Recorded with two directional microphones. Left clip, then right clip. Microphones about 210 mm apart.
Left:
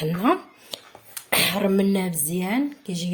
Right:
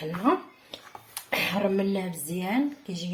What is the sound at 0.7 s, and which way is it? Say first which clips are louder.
A woman's voice: left 5 dB; 35° left (ahead or behind).